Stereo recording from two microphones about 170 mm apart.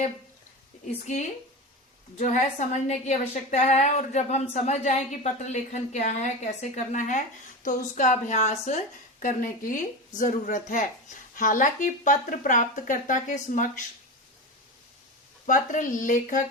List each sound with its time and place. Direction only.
1.0 s a woman's voice: 45° left (ahead or behind)
15.4 s a woman's voice: 50° left (ahead or behind)